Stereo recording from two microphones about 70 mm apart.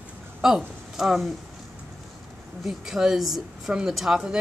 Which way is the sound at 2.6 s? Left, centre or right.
Centre.